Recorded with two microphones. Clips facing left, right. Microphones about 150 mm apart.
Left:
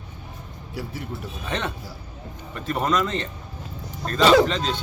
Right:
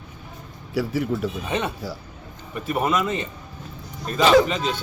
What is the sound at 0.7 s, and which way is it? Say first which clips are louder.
Speech: right 10 dB; 90° right.